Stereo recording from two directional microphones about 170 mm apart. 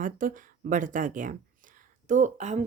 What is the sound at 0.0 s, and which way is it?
Speech, 50° right (ahead or behind).